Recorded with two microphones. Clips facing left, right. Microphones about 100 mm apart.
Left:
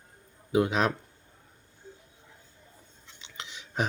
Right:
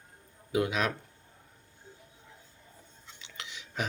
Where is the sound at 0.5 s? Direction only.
30° left (ahead or behind).